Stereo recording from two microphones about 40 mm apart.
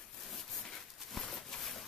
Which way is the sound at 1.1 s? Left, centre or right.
Centre.